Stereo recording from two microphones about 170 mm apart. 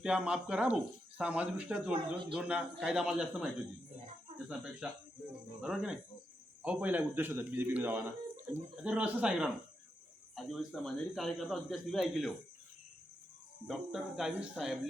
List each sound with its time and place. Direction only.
0.0 s a man's voice: 5° right (ahead or behind)
13.7 s a man's voice: centre (ahead or behind)